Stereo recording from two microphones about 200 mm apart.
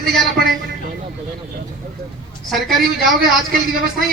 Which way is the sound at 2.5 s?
Centre (ahead or behind).